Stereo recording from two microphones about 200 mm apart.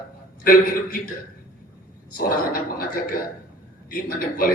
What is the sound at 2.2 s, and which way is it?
Speech, 45° left (ahead or behind).